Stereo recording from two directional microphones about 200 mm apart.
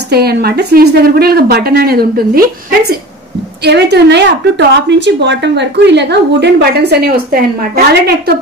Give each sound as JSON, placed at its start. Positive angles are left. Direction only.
{"t": 0.1, "sound": "a woman's voice", "side_deg": -50}
{"t": 3.6, "sound": "a woman's voice", "side_deg": -55}